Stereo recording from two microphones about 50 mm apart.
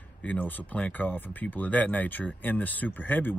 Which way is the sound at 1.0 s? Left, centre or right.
Left.